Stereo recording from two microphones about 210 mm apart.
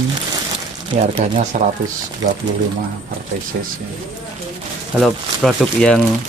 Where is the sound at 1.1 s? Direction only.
35° right (ahead or behind).